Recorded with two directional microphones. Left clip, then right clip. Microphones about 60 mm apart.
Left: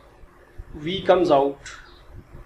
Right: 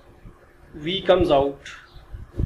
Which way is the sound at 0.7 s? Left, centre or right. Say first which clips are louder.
Even; centre.